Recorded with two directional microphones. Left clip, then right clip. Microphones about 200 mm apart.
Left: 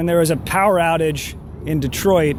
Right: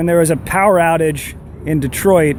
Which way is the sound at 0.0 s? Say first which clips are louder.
Right 3 dB; 35° right (ahead or behind).